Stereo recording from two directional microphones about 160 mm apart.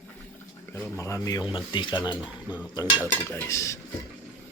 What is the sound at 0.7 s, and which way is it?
Speech, 20° left (ahead or behind).